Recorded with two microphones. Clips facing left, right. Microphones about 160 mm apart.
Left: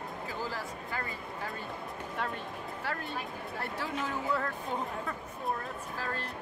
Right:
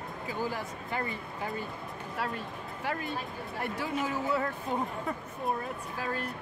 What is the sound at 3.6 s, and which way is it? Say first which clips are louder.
Speech: right 4 dB; 10° right (ahead or behind).